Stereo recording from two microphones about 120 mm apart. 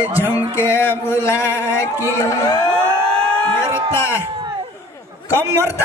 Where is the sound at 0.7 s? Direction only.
20° left (ahead or behind).